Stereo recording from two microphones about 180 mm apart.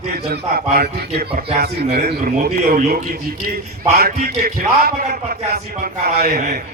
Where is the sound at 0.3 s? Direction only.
60° right (ahead or behind).